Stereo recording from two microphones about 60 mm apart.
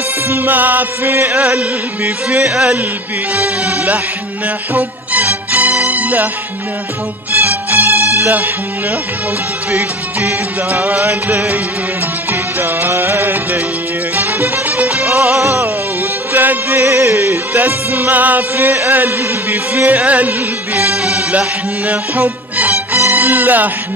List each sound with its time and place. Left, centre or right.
0.3 s music: right
2.5 s speech: centre
3.3 s music: right
7.3 s music: right
9.7 s music: right
15.3 s music: right
16.3 s music: right
16.8 s music: right
23.1 s speech: right